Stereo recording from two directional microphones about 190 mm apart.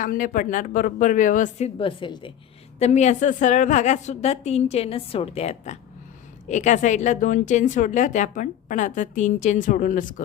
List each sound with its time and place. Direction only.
0.0 s speech: 45° left (ahead or behind)